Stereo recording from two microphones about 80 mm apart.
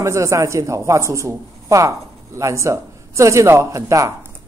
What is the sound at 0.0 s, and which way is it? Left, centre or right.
Speech, right.